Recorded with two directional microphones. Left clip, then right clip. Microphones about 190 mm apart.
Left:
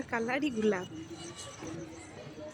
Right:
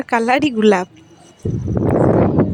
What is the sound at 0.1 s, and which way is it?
Speech, 55° right (ahead or behind).